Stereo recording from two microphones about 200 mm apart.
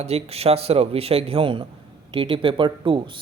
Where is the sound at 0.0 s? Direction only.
30° right (ahead or behind).